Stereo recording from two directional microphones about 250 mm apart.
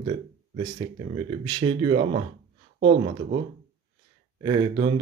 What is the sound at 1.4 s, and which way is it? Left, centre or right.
Speech, centre.